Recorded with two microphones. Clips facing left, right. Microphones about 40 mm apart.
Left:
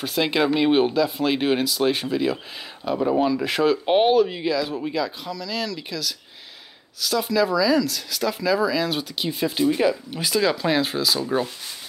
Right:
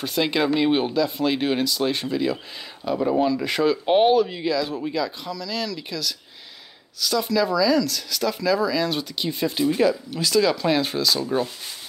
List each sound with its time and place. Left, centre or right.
0.0 s speech: centre
9.8 s speech: centre
10.4 s speech: centre